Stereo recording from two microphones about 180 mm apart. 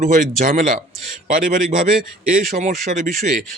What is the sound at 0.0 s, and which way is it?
Speech, 45° right (ahead or behind).